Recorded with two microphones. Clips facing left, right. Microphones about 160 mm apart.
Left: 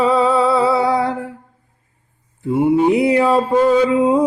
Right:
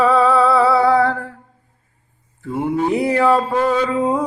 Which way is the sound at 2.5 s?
10° left (ahead or behind).